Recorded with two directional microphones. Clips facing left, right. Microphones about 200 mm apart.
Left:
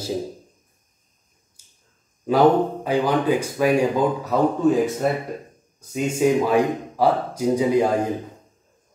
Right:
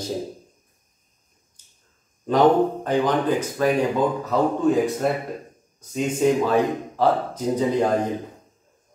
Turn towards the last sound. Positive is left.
turn(degrees=10)  # may be behind; listen again after turning